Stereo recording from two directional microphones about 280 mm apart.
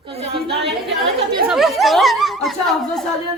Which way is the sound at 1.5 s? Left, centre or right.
Centre.